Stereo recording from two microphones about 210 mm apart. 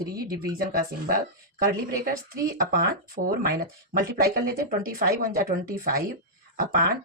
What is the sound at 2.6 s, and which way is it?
Speech, 45° right (ahead or behind).